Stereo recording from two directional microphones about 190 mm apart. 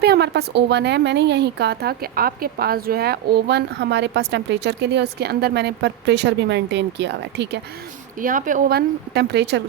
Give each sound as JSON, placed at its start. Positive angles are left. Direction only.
{"t": 0.0, "sound": "speech", "side_deg": -60}
{"t": 8.2, "sound": "speech", "side_deg": -45}